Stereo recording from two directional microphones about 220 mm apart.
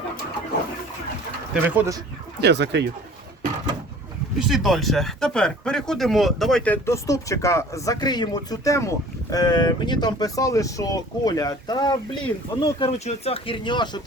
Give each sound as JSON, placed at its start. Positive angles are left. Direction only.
{"t": 1.6, "sound": "speech", "side_deg": -10}
{"t": 2.4, "sound": "speech", "side_deg": -50}
{"t": 4.4, "sound": "speech", "side_deg": 0}